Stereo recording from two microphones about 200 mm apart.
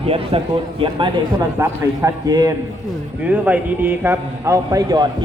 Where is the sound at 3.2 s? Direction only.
5° right (ahead or behind).